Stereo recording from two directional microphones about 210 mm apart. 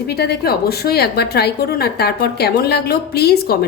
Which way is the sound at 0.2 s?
50° left (ahead or behind).